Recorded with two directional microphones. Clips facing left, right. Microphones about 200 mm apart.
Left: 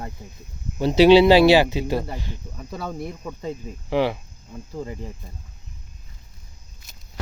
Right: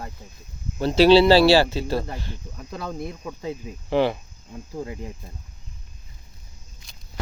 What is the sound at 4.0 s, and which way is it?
Speech, 5° left (ahead or behind).